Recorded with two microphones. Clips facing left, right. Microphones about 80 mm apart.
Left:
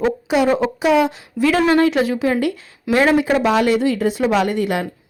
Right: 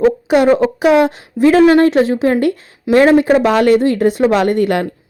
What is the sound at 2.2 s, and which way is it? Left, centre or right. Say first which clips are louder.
Speech: right 5 dB; right.